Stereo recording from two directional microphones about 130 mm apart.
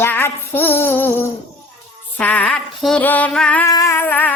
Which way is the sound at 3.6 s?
25° left (ahead or behind).